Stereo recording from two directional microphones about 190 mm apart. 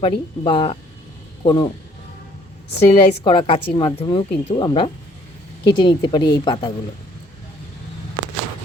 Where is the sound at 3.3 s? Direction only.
30° left (ahead or behind).